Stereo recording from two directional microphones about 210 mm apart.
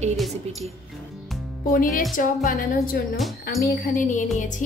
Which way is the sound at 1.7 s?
40° left (ahead or behind).